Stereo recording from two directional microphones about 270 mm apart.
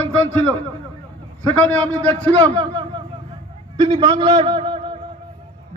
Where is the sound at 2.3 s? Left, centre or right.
Centre.